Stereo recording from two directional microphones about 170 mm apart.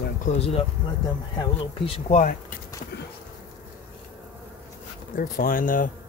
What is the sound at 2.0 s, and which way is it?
Speech, 45° left (ahead or behind).